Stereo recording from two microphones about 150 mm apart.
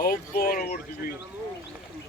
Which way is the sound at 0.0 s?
70° left (ahead or behind).